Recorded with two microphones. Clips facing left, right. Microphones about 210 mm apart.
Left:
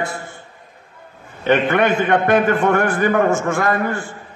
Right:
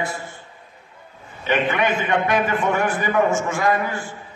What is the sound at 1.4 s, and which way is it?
A man's voice, 55° left (ahead or behind).